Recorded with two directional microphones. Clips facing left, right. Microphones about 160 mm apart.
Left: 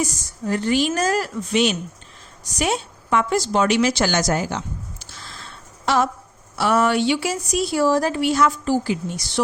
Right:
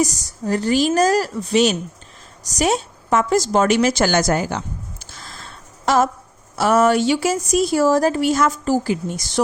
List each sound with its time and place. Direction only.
0.0 s a woman's voice: 40° right (ahead or behind)
5.2 s a sound: 45° right (ahead or behind)
6.6 s speech: 45° right (ahead or behind)